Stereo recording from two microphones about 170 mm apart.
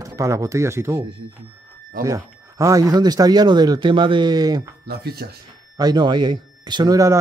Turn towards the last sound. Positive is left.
turn(degrees=-20)  # may be behind; listen again after turning